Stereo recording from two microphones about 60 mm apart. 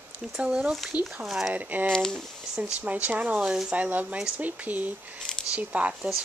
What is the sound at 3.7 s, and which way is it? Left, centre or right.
Speech, right.